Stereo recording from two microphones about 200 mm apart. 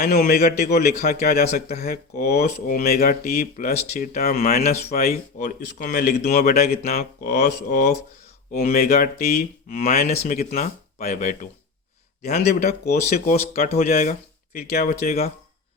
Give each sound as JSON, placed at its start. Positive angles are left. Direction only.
{"t": 0.0, "sound": "speech", "side_deg": 50}